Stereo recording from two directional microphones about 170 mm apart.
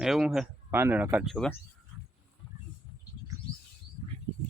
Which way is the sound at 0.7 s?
15° right (ahead or behind).